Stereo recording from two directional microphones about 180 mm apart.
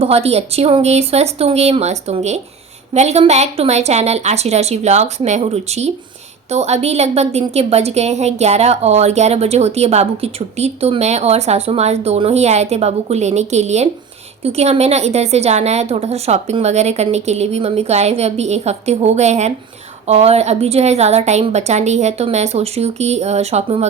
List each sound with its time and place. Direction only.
0.0 s a woman's voice: 35° right (ahead or behind)